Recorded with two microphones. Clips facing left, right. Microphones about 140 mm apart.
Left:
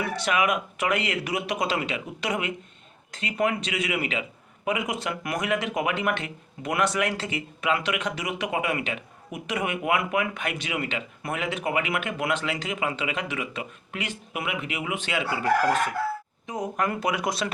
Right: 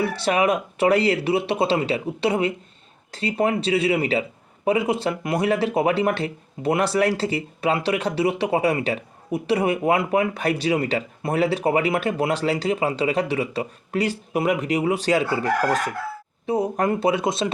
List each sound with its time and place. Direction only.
0.0 s a man's voice: 30° right (ahead or behind)